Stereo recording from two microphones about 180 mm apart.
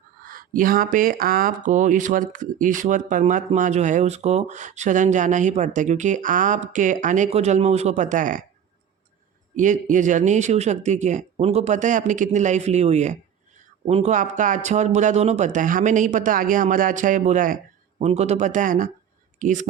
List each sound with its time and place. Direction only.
0.3 s speech: 50° right (ahead or behind)
9.6 s speech: 45° right (ahead or behind)